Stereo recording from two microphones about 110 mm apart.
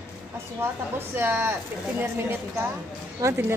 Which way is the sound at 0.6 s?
20° right (ahead or behind).